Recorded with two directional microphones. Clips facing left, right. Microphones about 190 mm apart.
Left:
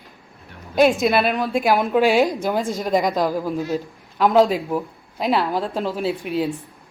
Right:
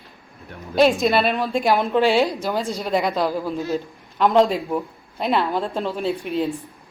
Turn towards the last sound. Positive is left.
turn(degrees=0)  # may be behind; listen again after turning